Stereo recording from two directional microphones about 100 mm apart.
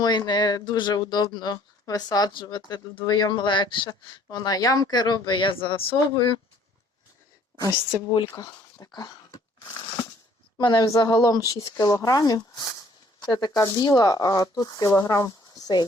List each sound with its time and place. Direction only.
0.0 s speech: 45° left (ahead or behind)
8.1 s speech: 60° left (ahead or behind)
8.4 s speech: 40° left (ahead or behind)